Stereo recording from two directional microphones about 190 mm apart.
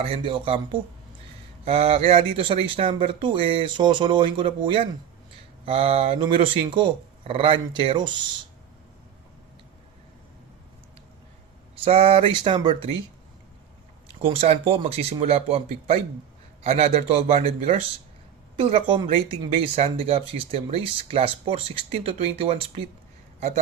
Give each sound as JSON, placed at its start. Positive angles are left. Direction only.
{"t": 0.0, "sound": "speech", "side_deg": -25}
{"t": 11.9, "sound": "speech", "side_deg": -30}
{"t": 14.2, "sound": "speech", "side_deg": -30}
{"t": 18.5, "sound": "speech", "side_deg": -30}